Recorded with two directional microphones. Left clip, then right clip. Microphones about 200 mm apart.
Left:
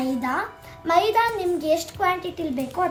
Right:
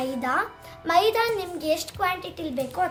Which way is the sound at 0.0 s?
50° right (ahead or behind).